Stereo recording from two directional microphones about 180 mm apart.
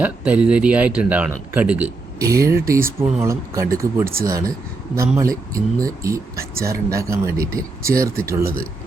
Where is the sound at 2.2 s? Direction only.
20° right (ahead or behind).